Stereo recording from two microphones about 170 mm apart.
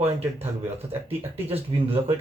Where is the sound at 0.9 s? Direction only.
10° right (ahead or behind).